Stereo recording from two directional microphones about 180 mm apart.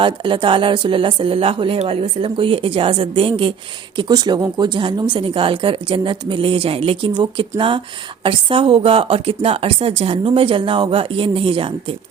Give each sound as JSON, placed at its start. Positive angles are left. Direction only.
{"t": 0.0, "sound": "speech", "side_deg": -25}